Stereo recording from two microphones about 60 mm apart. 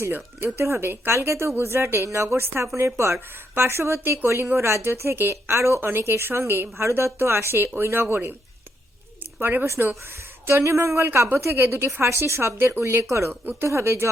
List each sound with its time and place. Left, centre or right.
0.1 s speech: right
0.5 s a woman's voice: right
9.4 s speech: right
9.6 s a woman's voice: right